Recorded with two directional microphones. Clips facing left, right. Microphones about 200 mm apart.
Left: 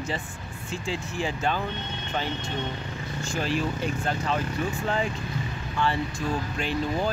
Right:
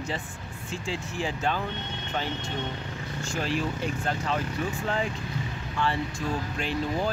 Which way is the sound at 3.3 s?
Centre (ahead or behind).